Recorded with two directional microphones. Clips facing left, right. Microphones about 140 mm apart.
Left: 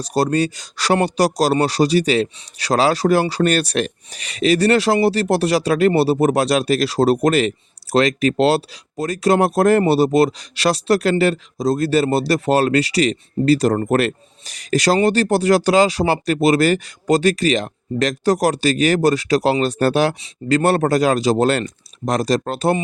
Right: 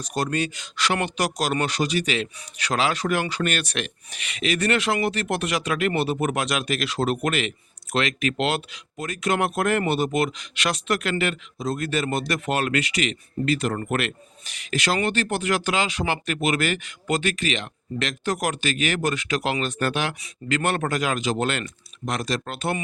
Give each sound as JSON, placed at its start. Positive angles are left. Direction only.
{"t": 0.0, "sound": "speech", "side_deg": 35}